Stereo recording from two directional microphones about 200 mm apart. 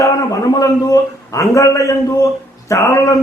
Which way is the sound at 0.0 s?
15° left (ahead or behind).